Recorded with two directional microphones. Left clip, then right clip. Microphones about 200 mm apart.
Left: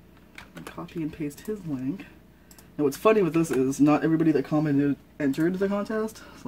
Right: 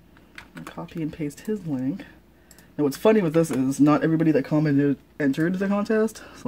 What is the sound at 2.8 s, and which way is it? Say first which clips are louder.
Speech: right 1 dB; 45° right (ahead or behind).